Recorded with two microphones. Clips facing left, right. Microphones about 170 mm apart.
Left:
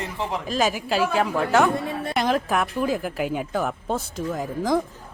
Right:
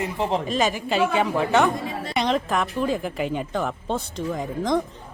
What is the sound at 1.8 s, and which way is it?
Speech, 60° left (ahead or behind).